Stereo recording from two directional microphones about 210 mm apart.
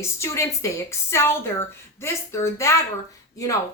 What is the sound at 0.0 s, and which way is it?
A woman's voice, 15° left (ahead or behind).